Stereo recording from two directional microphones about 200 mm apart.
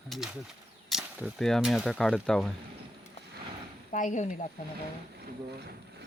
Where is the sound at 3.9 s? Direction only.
40° left (ahead or behind).